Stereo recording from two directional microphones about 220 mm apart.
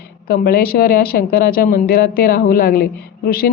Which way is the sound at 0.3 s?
45° left (ahead or behind).